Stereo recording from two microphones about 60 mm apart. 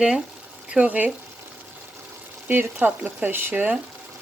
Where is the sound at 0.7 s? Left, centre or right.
Right.